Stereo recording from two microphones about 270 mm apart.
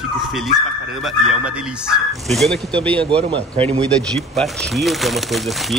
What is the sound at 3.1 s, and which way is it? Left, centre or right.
Speech, centre.